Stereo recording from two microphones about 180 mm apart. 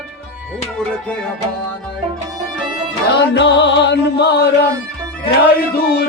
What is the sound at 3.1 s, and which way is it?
Music, 75° left (ahead or behind).